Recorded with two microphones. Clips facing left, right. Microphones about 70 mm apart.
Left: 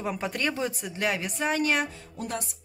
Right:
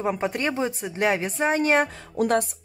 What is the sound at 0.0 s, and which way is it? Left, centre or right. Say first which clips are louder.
A woman's voice: right 4 dB; right.